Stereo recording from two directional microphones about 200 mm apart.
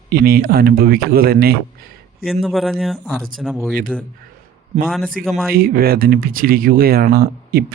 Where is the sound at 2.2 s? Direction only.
Centre (ahead or behind).